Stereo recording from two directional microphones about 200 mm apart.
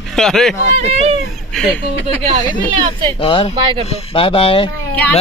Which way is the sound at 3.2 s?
25° left (ahead or behind).